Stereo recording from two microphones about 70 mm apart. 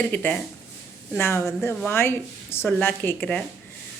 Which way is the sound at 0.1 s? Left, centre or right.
Left.